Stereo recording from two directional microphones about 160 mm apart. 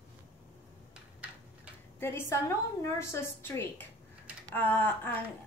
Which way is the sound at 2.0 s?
15° left (ahead or behind).